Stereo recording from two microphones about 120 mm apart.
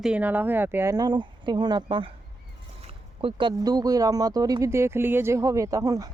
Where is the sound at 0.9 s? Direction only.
35° right (ahead or behind).